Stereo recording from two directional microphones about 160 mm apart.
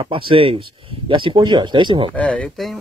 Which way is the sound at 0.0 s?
35° right (ahead or behind).